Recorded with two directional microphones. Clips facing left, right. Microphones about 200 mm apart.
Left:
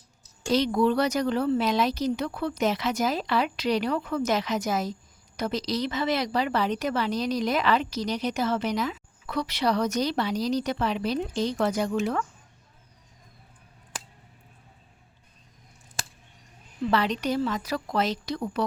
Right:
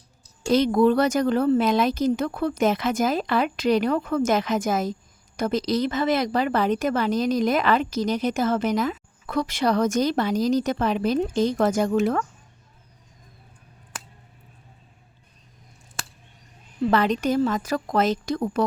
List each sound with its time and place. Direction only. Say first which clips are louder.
0.5 s a woman's voice: right 4 dB; 50° right (ahead or behind)
16.9 s a woman's voice: right 4 dB; 50° right (ahead or behind)